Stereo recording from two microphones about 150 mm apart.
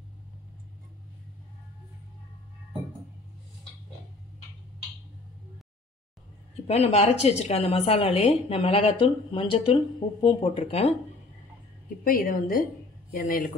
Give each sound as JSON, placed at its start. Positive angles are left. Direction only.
{"t": 6.7, "sound": "a woman's voice", "side_deg": 45}
{"t": 12.0, "sound": "a woman's voice", "side_deg": 70}